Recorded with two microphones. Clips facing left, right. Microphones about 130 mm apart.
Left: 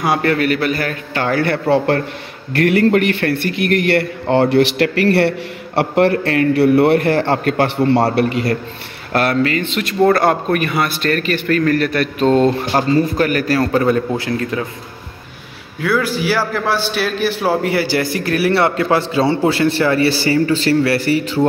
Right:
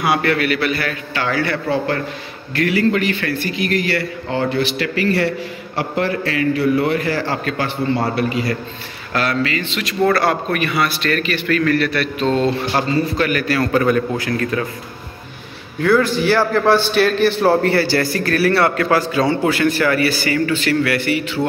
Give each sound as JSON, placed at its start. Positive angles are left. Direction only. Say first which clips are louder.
{"t": 0.0, "sound": "a man's voice", "louder": "left 2 dB", "side_deg": 40}
{"t": 9.1, "sound": "a man's voice", "louder": "left 4 dB", "side_deg": 50}
{"t": 15.8, "sound": "a man's voice", "louder": "right 3 dB", "side_deg": 5}